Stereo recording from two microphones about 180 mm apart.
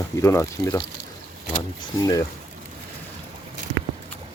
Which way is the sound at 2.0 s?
20° left (ahead or behind).